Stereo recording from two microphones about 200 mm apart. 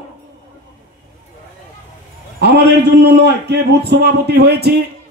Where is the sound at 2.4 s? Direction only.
55° right (ahead or behind).